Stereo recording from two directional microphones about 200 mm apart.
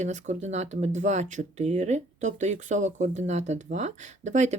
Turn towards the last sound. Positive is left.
turn(degrees=-35)  # may be behind; listen again after turning